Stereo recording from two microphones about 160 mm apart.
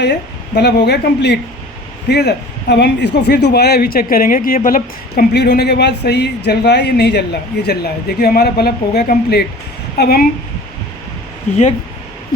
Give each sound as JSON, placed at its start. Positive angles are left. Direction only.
{"t": 0.0, "sound": "speech", "side_deg": 90}
{"t": 8.2, "sound": "speech", "side_deg": 80}